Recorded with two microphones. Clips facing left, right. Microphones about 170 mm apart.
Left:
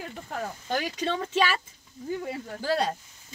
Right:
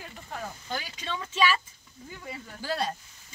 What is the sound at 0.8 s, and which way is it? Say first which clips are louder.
Speech: left 8 dB; 45° left (ahead or behind).